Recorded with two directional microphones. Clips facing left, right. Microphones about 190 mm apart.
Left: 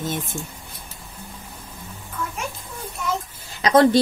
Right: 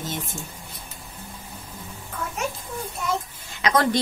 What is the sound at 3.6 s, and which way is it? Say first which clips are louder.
Speech: left 6 dB; 30° left (ahead or behind).